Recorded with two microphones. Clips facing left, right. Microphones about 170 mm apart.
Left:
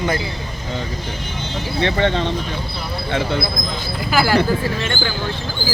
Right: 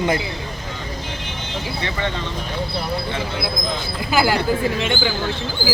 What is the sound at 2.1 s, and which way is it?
Speech, 75° left (ahead or behind).